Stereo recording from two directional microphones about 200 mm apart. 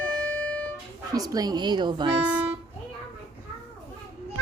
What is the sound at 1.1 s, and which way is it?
A woman's voice, 15° right (ahead or behind).